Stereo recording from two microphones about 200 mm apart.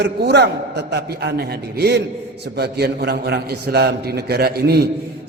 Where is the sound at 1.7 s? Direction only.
55° right (ahead or behind).